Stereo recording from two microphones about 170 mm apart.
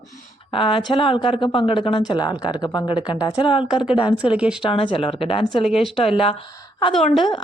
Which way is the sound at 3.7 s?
5° right (ahead or behind).